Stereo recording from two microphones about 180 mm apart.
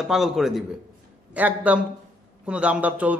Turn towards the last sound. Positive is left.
turn(degrees=-10)  # may be behind; listen again after turning